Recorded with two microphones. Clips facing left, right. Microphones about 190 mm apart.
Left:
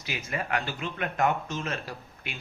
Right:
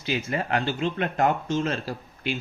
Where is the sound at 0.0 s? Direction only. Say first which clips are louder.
Right 6 dB; 30° right (ahead or behind).